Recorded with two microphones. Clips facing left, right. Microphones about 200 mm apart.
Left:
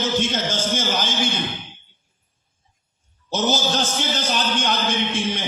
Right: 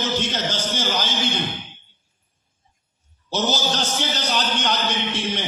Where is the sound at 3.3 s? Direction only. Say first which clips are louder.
Left 2 dB; 50° left (ahead or behind).